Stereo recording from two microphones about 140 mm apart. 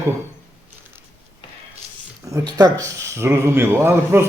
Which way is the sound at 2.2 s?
25° right (ahead or behind).